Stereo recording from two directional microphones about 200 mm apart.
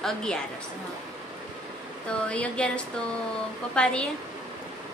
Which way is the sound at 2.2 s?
5° left (ahead or behind).